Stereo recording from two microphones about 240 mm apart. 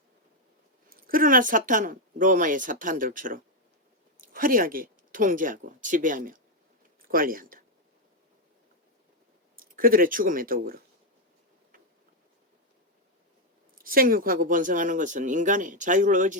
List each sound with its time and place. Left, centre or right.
0.9 s speech: right
9.6 s speech: right
13.7 s speech: right